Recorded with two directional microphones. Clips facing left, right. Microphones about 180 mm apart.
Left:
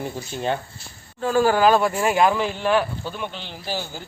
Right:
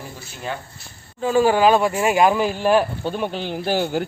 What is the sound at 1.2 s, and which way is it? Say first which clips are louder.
Speech: right 2 dB; 5° right (ahead or behind).